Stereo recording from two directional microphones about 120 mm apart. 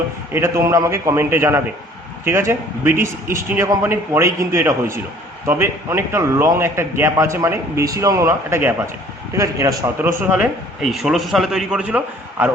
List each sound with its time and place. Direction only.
0.3 s a man's voice: 20° right (ahead or behind)
10.9 s a man's voice: centre (ahead or behind)